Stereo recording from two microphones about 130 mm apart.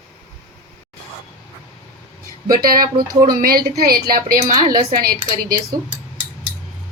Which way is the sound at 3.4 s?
90° right.